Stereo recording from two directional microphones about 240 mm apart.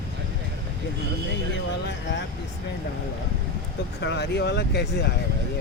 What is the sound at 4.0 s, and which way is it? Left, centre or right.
Speech, left.